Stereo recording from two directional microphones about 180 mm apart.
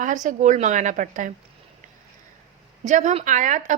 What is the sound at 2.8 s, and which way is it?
Speech, 40° right (ahead or behind).